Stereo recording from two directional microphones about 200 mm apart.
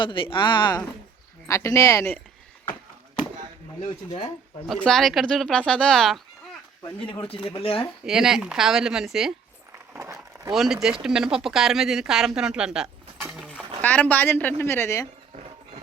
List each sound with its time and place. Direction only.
0.0 s a woman's voice: 25° left (ahead or behind)
4.7 s speech: centre (ahead or behind)
7.0 s speech: 25° left (ahead or behind)
8.0 s speech: 5° right (ahead or behind)
9.9 s a sound: 15° right (ahead or behind)
10.5 s speech: centre (ahead or behind)
13.8 s a woman's voice: 10° left (ahead or behind)